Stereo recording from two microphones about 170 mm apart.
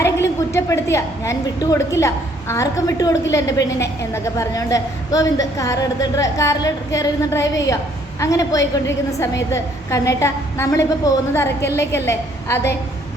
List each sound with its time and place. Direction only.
0.0 s a woman's voice: 15° left (ahead or behind)